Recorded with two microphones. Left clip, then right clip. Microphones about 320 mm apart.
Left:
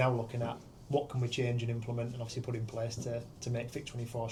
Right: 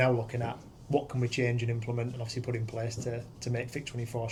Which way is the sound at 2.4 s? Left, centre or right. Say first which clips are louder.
Right 2 dB; right.